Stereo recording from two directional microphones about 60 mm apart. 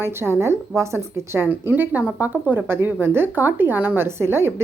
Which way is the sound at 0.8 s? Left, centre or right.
Right.